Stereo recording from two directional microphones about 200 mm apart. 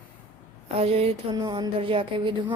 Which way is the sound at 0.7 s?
30° right (ahead or behind).